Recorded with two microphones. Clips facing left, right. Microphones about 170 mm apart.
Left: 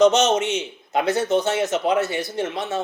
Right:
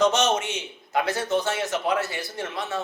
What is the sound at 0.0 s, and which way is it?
A man's voice, 20° left (ahead or behind).